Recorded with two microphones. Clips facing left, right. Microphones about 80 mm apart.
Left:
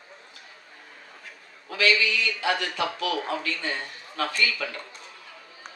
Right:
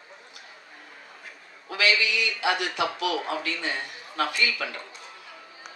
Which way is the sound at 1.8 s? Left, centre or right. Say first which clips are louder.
Left 1 dB; centre.